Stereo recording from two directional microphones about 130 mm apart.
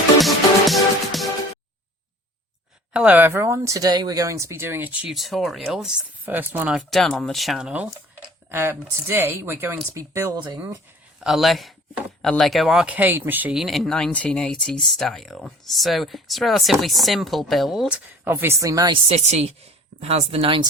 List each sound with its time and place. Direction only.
0.2 s music: centre (ahead or behind)
2.9 s speech: 10° right (ahead or behind)
5.0 s speech: centre (ahead or behind); by 10.3 s 20° right (ahead or behind)
11.2 s speech: centre (ahead or behind); by 18.9 s 25° right (ahead or behind)
19.0 s speech: 55° right (ahead or behind)